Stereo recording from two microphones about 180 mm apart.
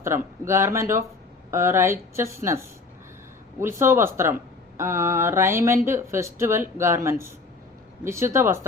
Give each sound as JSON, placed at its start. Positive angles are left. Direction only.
{"t": 0.0, "sound": "speech", "side_deg": -15}